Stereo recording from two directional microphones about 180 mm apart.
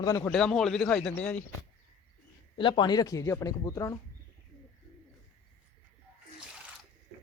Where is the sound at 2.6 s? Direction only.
25° left (ahead or behind).